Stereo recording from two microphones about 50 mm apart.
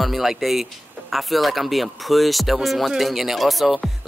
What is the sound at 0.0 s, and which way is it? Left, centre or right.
Speech, centre.